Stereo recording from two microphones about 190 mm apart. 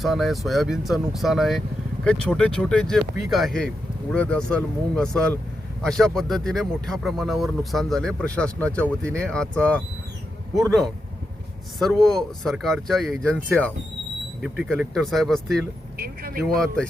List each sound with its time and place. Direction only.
0.0 s speech: centre (ahead or behind)
14.4 s speech: 5° right (ahead or behind)
16.0 s speech: 50° right (ahead or behind)